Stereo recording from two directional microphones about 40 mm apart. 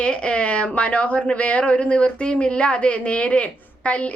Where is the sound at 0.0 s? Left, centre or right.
Left.